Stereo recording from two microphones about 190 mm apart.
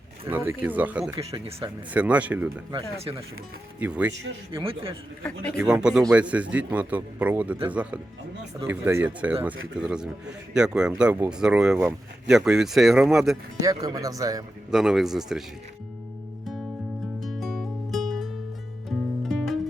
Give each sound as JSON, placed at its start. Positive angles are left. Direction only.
{"t": 0.3, "sound": "a man's voice", "side_deg": -10}
{"t": 1.1, "sound": "speech", "side_deg": -30}
{"t": 1.9, "sound": "a man's voice", "side_deg": -5}
{"t": 3.0, "sound": "speech", "side_deg": -30}
{"t": 3.8, "sound": "a man's voice", "side_deg": -10}
{"t": 4.6, "sound": "a man's voice", "side_deg": -30}
{"t": 5.2, "sound": "a man's voice", "side_deg": 5}
{"t": 6.1, "sound": "a man's voice", "side_deg": -5}
{"t": 13.6, "sound": "a man's voice", "side_deg": -20}
{"t": 14.7, "sound": "a man's voice", "side_deg": -5}
{"t": 17.2, "sound": "music", "side_deg": 0}